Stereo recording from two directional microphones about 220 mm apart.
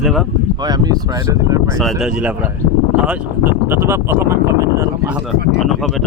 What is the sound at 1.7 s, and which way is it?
Speech, centre (ahead or behind).